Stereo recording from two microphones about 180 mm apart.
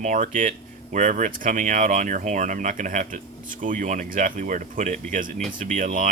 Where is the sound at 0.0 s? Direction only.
45° right (ahead or behind).